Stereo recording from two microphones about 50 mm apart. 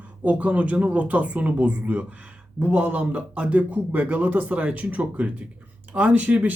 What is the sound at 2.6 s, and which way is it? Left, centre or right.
Speech, right.